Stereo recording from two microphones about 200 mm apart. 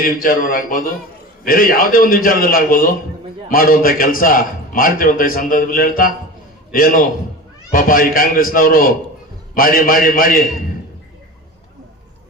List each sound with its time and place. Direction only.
0.0 s a man's voice: 45° left (ahead or behind)